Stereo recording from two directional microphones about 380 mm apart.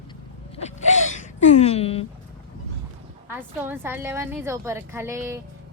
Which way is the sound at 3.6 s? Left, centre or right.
Centre.